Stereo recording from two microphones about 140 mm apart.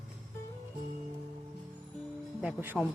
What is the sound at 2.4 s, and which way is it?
Speech, 10° right (ahead or behind).